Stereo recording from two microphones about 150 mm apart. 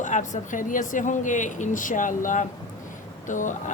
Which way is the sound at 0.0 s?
55° left (ahead or behind).